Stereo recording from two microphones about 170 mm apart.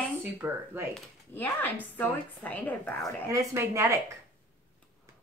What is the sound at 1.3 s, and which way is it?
Speech, 10° left (ahead or behind).